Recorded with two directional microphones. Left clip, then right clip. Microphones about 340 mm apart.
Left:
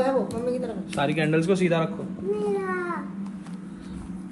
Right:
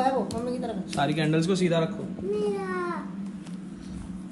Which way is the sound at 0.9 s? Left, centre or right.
Centre.